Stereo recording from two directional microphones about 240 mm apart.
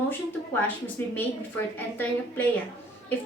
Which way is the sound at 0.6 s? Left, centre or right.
Centre.